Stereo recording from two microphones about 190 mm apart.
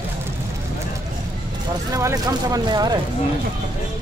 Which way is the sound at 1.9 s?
20° right (ahead or behind).